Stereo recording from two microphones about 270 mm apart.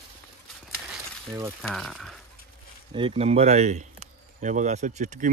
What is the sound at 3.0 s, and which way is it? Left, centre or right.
Speech, right.